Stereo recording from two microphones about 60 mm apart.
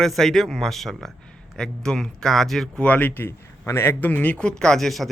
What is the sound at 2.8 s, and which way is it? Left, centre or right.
Speech, left.